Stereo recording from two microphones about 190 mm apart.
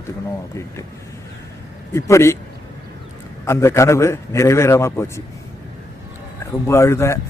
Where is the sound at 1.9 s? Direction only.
15° left (ahead or behind).